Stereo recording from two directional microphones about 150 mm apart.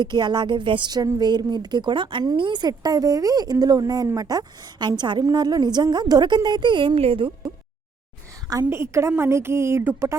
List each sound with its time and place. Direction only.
0.0 s speech: 30° right (ahead or behind)
8.4 s a woman's voice: 20° right (ahead or behind)